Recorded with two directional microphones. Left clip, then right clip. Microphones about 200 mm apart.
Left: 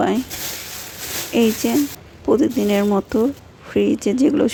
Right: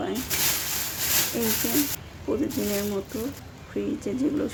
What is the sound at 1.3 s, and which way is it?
Speech, 50° left (ahead or behind).